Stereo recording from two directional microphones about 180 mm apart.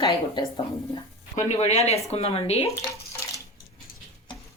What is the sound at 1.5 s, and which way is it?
Speech, 35° left (ahead or behind).